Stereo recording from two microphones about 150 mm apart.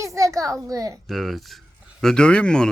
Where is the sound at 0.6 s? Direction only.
25° right (ahead or behind).